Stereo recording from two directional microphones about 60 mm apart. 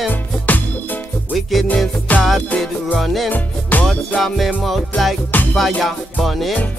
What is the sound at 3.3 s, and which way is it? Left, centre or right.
Music, left.